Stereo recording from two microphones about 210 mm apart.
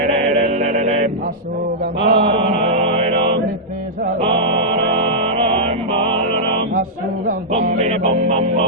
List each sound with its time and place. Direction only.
0.3 s mantra: 35° right (ahead or behind)
5.2 s music: 25° right (ahead or behind)
7.3 s music: 35° right (ahead or behind)